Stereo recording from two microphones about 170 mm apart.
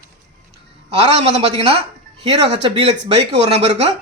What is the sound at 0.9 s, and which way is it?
Speech, 35° right (ahead or behind).